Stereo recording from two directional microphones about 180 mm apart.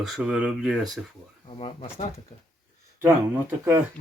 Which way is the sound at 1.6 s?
30° left (ahead or behind).